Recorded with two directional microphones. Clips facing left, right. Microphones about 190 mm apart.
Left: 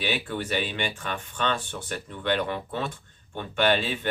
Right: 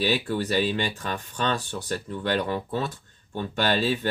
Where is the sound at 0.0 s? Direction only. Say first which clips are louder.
Right 4 dB; 40° right (ahead or behind).